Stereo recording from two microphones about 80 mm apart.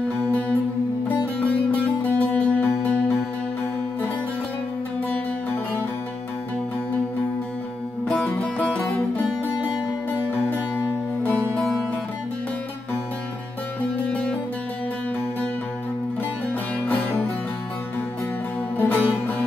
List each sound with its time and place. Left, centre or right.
0.2 s music: centre
1.7 s music: centre
8.1 s music: centre
18.8 s music: left